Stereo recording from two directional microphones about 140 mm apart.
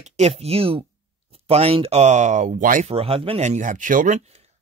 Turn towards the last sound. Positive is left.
turn(degrees=-65)  # may be behind; listen again after turning